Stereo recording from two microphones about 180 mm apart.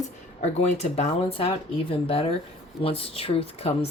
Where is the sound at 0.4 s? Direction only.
35° left (ahead or behind).